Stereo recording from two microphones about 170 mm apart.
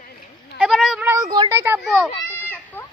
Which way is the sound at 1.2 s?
20° right (ahead or behind).